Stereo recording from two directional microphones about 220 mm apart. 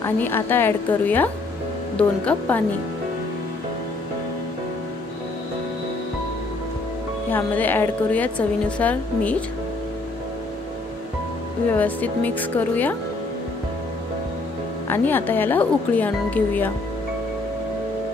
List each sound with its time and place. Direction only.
0.0 s a woman's voice: 10° left (ahead or behind)
7.2 s a woman's voice: 10° left (ahead or behind)
11.7 s a woman's voice: 5° left (ahead or behind)
14.9 s a woman's voice: 10° left (ahead or behind)